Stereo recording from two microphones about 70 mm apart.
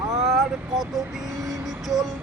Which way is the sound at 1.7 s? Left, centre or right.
Centre.